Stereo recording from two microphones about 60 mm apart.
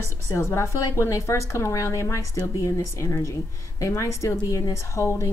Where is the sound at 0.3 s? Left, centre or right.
Left.